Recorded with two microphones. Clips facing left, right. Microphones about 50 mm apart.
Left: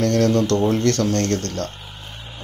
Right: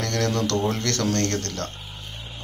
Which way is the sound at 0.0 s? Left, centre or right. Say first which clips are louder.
Left 7 dB; left.